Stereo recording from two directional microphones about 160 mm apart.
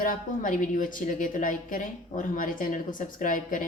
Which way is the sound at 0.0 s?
55° left (ahead or behind).